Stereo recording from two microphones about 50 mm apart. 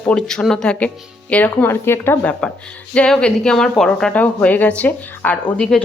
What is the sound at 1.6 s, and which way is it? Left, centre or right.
Speech, left.